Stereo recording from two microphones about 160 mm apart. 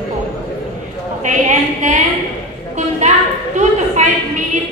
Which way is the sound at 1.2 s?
50° right (ahead or behind).